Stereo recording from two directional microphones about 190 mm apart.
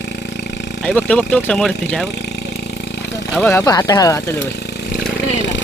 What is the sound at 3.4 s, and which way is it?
Speech, 15° left (ahead or behind).